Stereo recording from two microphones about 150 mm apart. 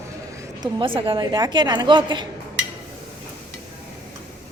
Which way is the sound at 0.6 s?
35° right (ahead or behind).